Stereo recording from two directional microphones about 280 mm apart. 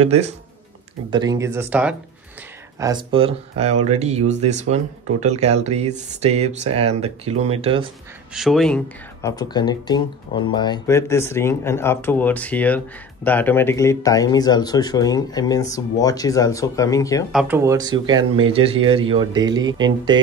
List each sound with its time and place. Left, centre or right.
1.1 s speech: centre
2.8 s speech: centre
8.4 s speech: centre
17.3 s speech: centre